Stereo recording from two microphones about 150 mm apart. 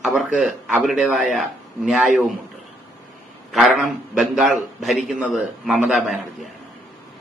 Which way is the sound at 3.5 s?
Centre (ahead or behind).